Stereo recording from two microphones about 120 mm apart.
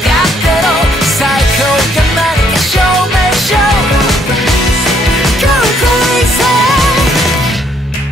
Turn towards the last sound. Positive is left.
turn(degrees=0)  # may be behind; listen again after turning